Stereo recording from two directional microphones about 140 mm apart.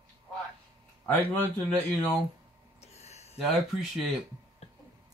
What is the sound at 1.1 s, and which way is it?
Speech, 10° left (ahead or behind).